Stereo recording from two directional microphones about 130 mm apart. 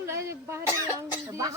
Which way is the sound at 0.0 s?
20° right (ahead or behind).